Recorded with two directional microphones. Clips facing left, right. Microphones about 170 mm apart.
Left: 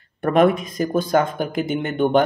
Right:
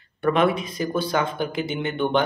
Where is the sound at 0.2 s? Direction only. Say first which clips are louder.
Left 4 dB; 45° left (ahead or behind).